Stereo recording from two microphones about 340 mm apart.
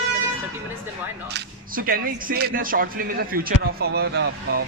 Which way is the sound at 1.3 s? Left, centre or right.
Right.